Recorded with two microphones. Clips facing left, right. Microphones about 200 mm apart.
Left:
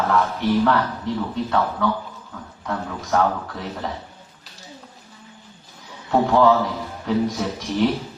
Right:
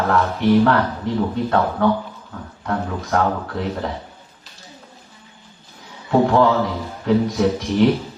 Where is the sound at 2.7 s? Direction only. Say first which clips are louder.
Right 2 dB; 55° right (ahead or behind).